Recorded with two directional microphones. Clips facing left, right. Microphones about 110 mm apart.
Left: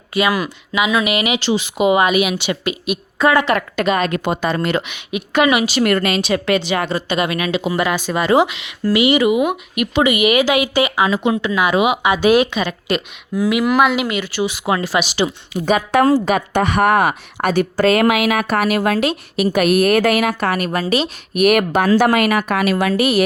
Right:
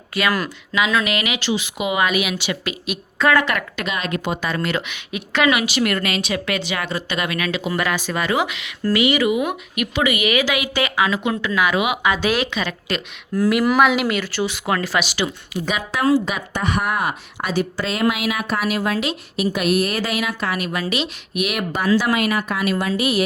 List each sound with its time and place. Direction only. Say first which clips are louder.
0.1 s speech: left 4 dB; 15° left (ahead or behind); by 2.0 s 30° left (ahead or behind)
2.0 s a woman's voice: left 5 dB; 20° left (ahead or behind)
3.8 s speech: left 7 dB; 45° left (ahead or behind)
4.4 s speech: left 4 dB; 25° left (ahead or behind)
5.7 s speech: left 5 dB; 35° left (ahead or behind); by 13.0 s 15° left (ahead or behind)
13.3 s speech: left 1 dB; centre (ahead or behind)
14.3 s a woman's voice: left 3 dB; 15° left (ahead or behind)
15.5 s speech: left 10 dB; 45° left (ahead or behind)
16.2 s a woman's voice: left 7 dB; 60° left (ahead or behind)